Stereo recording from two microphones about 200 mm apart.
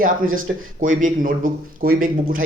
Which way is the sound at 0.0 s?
45° right (ahead or behind).